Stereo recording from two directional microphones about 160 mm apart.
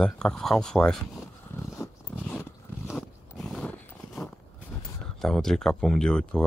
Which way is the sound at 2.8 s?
Centre (ahead or behind).